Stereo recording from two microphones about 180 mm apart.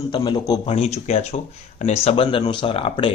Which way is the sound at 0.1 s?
25° left (ahead or behind).